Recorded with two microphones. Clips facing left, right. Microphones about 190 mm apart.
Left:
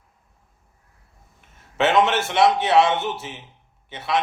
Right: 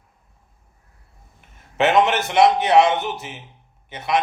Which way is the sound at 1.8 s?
15° right (ahead or behind).